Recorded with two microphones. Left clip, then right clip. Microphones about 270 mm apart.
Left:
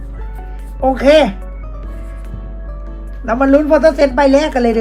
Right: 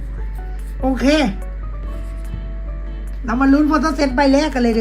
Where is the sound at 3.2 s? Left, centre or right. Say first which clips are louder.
Left 4 dB; centre.